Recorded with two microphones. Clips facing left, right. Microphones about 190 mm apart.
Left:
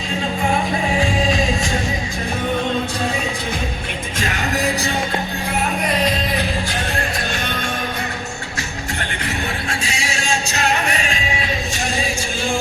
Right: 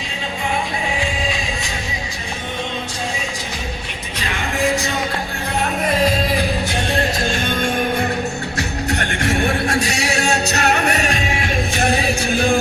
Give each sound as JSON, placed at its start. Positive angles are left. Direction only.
{"t": 4.2, "sound": "music", "side_deg": 35}
{"t": 8.9, "sound": "music", "side_deg": -55}
{"t": 11.2, "sound": "music", "side_deg": -55}